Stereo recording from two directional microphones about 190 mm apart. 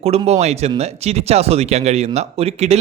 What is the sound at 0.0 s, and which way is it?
Speech, 30° right (ahead or behind).